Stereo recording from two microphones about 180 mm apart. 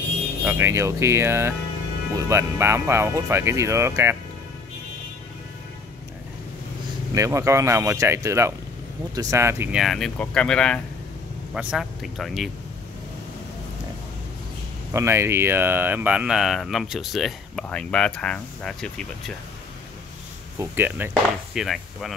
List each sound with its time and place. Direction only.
0.5 s speech: 15° right (ahead or behind)
7.2 s speech: 15° right (ahead or behind); by 12.4 s centre (ahead or behind)
14.9 s speech: 15° right (ahead or behind); by 19.3 s 5° left (ahead or behind)
20.5 s speech: 10° right (ahead or behind)
21.1 s speech: centre (ahead or behind)